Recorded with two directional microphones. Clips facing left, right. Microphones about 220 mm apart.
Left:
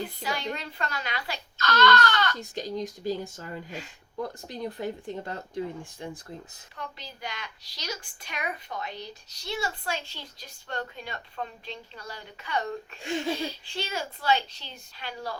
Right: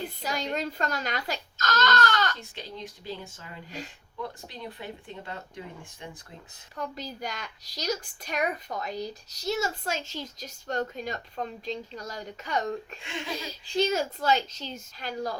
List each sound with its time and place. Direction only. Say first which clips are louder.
0.2 s a woman's voice: right 2 dB; 40° right (ahead or behind)
2.4 s speech: left 8 dB; 40° left (ahead or behind)
6.7 s a woman's voice: right 6 dB; 45° right (ahead or behind)
13.0 s speech: left 7 dB; 40° left (ahead or behind)
13.7 s a woman's voice: right 8 dB; 40° right (ahead or behind)